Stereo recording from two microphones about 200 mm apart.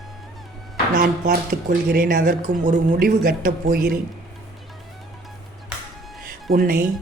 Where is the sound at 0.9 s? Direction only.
50° right (ahead or behind).